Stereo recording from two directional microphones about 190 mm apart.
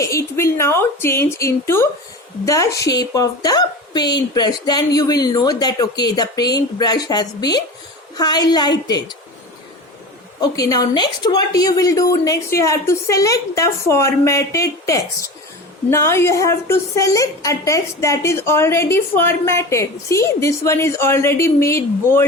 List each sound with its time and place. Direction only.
0.0 s a woman's voice: 15° left (ahead or behind)
10.5 s a woman's voice: 20° left (ahead or behind)